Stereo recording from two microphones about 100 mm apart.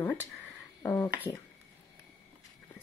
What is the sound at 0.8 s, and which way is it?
Speech, 35° left (ahead or behind).